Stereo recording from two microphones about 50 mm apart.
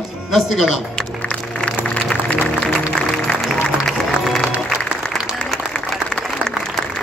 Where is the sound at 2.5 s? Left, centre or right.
Centre.